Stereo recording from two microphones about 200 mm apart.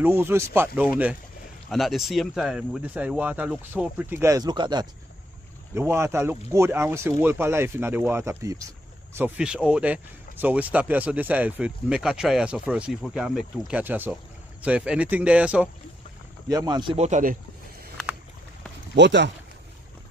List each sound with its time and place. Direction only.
0.0 s speech: 10° right (ahead or behind)
16.4 s speech: 20° right (ahead or behind); by 17.4 s 40° right (ahead or behind)
18.9 s speech: 60° right (ahead or behind)